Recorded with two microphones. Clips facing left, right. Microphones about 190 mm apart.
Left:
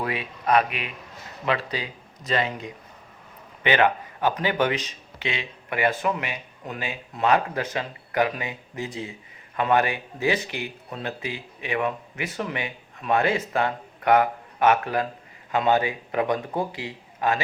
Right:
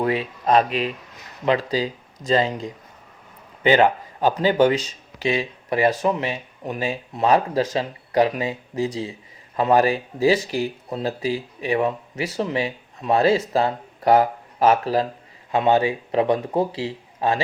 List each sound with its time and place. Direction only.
0.0 s speech: 30° right (ahead or behind)